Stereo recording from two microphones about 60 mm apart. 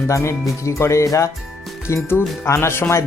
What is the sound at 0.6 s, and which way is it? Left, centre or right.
Speech, left.